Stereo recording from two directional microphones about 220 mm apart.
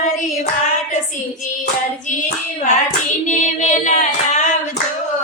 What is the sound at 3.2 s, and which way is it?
Child singing, 35° left (ahead or behind).